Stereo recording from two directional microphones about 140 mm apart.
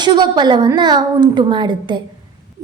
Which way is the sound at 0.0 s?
35° right (ahead or behind).